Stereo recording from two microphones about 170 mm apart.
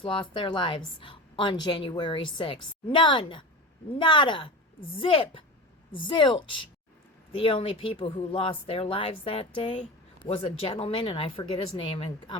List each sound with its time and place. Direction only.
0.0 s a woman's voice: 30° left (ahead or behind)